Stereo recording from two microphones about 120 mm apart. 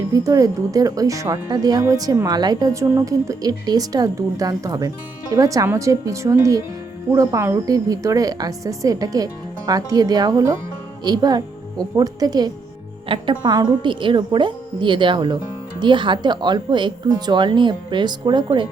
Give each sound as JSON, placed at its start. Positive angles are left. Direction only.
{"t": 0.1, "sound": "a woman's voice", "side_deg": -30}
{"t": 13.1, "sound": "a woman's voice", "side_deg": -45}